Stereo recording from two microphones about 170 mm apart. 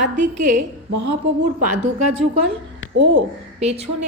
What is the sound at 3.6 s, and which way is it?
Speech, 40° right (ahead or behind).